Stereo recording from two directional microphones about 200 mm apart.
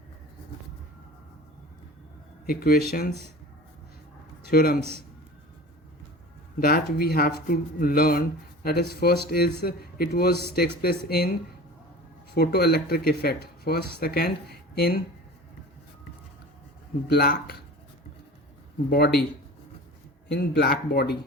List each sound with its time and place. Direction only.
2.5 s speech: 50° left (ahead or behind)
4.4 s speech: 50° left (ahead or behind)
6.6 s speech: 50° left (ahead or behind)
17.1 s speech: 50° left (ahead or behind)
18.9 s speech: 55° left (ahead or behind)
20.2 s speech: 60° left (ahead or behind)